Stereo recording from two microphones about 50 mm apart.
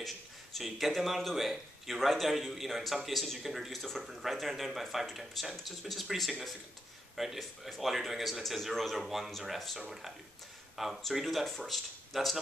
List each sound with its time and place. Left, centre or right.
0.6 s speech: centre